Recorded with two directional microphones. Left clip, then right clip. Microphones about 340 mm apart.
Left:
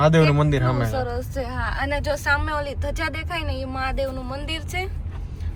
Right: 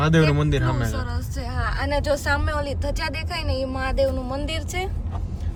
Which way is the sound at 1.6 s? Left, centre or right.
Centre.